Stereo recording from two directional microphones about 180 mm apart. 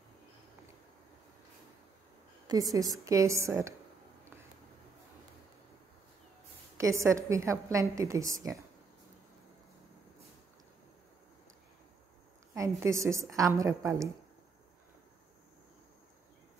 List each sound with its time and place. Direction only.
2.4 s a woman's voice: 20° right (ahead or behind)
6.8 s a woman's voice: 15° right (ahead or behind)
12.5 s a woman's voice: 15° right (ahead or behind)